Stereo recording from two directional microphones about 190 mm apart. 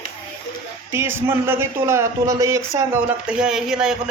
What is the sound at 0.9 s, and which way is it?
Speech, 10° right (ahead or behind).